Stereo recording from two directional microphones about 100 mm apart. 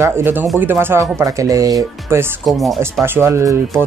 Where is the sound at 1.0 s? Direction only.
35° right (ahead or behind).